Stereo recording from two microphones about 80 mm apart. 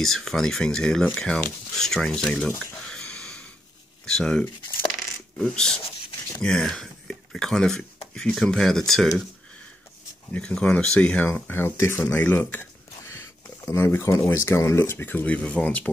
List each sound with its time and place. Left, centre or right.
0.0 s speech: centre
1.8 s a sound: centre
4.0 s speech: centre
5.5 s speech: centre
10.3 s speech: centre
13.0 s a sound: left
14.3 s speech: left; by 15.9 s centre